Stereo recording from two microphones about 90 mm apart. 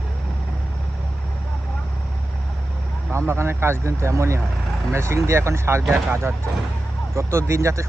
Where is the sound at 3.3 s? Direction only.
25° right (ahead or behind).